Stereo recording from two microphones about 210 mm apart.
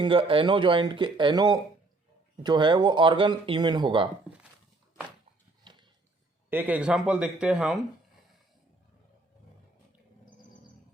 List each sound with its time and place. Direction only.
0.0 s speech: 25° right (ahead or behind)
6.5 s speech: 10° right (ahead or behind)